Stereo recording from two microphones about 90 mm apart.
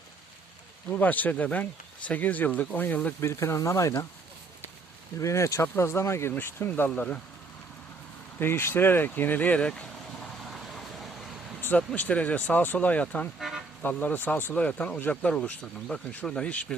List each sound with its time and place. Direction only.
0.9 s speech: 20° left (ahead or behind); by 4.0 s 40° left (ahead or behind)
5.2 s speech: 35° left (ahead or behind); by 7.2 s 15° left (ahead or behind)
8.4 s speech: 25° left (ahead or behind)
10.4 s vehicle: centre (ahead or behind)
11.9 s speech: 15° left (ahead or behind)